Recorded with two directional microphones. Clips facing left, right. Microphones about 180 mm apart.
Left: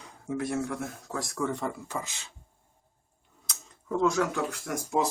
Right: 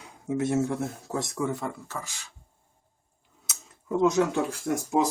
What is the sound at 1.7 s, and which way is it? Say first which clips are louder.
Speech: left 2 dB; 15° left (ahead or behind).